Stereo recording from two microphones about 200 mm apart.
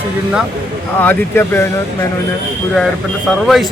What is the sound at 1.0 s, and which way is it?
Speech, 10° left (ahead or behind).